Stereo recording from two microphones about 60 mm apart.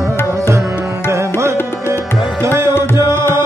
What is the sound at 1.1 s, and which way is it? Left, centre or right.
Music, right.